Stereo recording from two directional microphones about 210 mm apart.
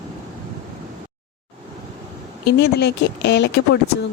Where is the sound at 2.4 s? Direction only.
50° left (ahead or behind).